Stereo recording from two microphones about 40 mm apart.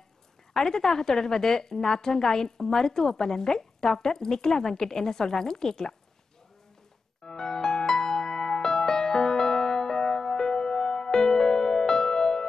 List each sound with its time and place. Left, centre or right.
0.5 s a woman's voice: centre
7.2 s music: centre